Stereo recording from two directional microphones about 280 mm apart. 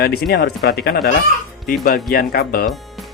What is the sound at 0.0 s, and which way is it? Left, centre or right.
Speech, left.